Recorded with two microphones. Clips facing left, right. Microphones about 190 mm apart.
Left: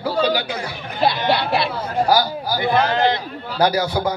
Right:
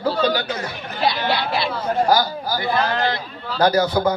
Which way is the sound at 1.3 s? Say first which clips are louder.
Left 2 dB; 65° left (ahead or behind).